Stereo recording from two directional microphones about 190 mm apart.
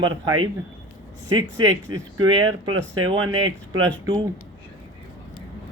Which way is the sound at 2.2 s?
25° right (ahead or behind).